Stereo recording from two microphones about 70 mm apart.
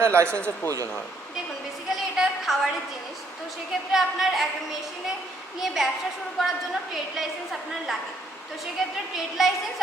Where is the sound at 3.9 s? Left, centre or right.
Centre.